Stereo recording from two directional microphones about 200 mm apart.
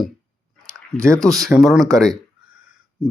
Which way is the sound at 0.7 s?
15° right (ahead or behind).